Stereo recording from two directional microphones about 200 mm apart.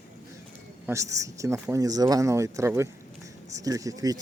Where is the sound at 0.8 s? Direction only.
15° right (ahead or behind).